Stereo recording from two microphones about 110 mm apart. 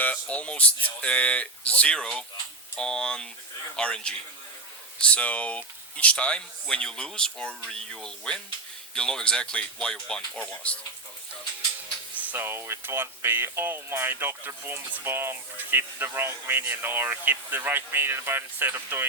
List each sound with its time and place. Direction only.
0.0 s speech: 10° left (ahead or behind)
12.2 s speech: 20° right (ahead or behind)